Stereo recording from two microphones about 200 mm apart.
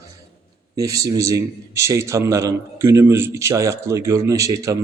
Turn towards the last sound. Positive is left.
turn(degrees=-15)  # may be behind; listen again after turning